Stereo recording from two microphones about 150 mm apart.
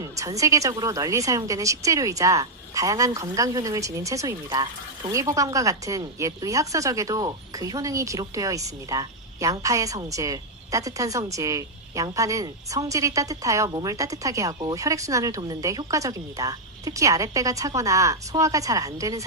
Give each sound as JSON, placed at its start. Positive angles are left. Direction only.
{"t": 0.0, "sound": "speech", "side_deg": -20}
{"t": 4.4, "sound": "speech", "side_deg": -30}
{"t": 5.1, "sound": "speech", "side_deg": -20}